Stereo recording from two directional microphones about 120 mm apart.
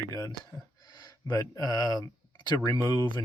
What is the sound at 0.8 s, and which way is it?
Speech, 35° left (ahead or behind).